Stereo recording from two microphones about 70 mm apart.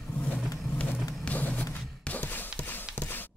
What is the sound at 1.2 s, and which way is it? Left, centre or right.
Music, left.